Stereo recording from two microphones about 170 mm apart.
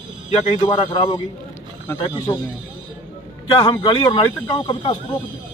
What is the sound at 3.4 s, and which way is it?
Speech, 25° left (ahead or behind).